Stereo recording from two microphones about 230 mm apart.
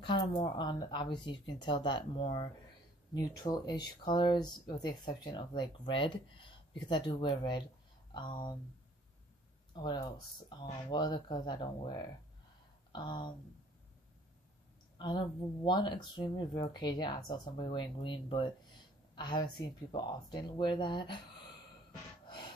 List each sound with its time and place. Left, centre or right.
0.1 s speech: centre
9.8 s speech: centre
15.0 s speech: centre
22.2 s a sound: left